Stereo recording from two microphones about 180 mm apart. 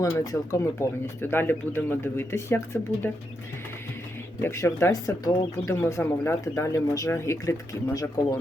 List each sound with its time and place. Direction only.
0.0 s speech: 15° left (ahead or behind)
4.4 s speech: 15° left (ahead or behind)